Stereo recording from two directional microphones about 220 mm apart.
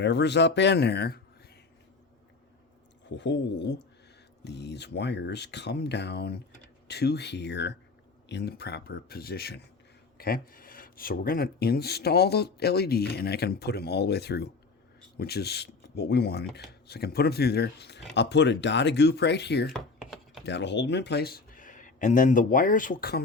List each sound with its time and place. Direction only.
0.0 s speech: 50° left (ahead or behind)
3.1 s speech: 55° left (ahead or behind)
19.7 s typing: centre (ahead or behind)
20.4 s speech: 50° left (ahead or behind)